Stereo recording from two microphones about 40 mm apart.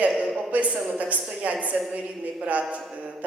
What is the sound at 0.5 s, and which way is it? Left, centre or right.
A man's voice, right.